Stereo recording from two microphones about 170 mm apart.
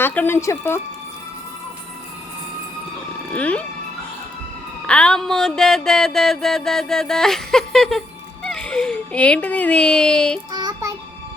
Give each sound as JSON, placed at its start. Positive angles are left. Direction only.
{"t": 0.0, "sound": "speech", "side_deg": 10}
{"t": 3.3, "sound": "speech", "side_deg": 10}
{"t": 4.9, "sound": "a sound", "side_deg": 5}
{"t": 10.5, "sound": "child singing", "side_deg": -25}